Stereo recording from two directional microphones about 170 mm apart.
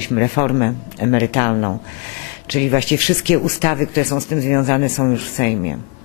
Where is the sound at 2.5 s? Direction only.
10° left (ahead or behind).